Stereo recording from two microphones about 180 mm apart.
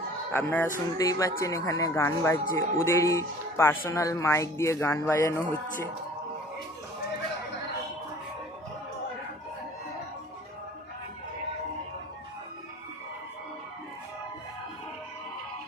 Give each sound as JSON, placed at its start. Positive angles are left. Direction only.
{"t": 0.3, "sound": "speech", "side_deg": 10}